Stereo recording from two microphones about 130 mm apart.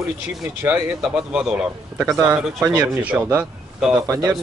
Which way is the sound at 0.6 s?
10° right (ahead or behind).